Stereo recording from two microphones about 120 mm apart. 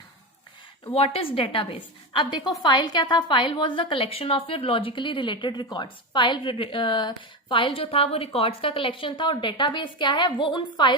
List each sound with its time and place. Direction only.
0.9 s a woman's voice: 50° left (ahead or behind)